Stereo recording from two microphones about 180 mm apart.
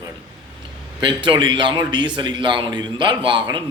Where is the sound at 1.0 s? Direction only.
25° right (ahead or behind).